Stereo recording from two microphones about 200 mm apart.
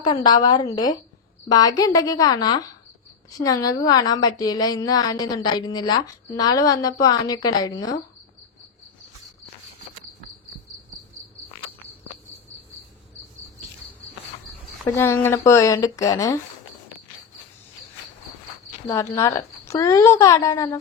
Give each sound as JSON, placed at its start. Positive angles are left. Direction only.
{"t": 0.0, "sound": "a woman's voice", "side_deg": 20}
{"t": 14.9, "sound": "a woman's voice", "side_deg": 10}
{"t": 18.9, "sound": "a woman's voice", "side_deg": 15}